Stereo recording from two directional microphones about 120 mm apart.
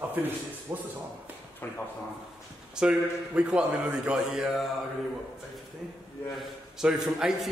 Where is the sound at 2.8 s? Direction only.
5° right (ahead or behind).